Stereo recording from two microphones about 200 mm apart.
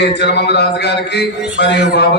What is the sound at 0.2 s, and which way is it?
A man's voice, 55° left (ahead or behind).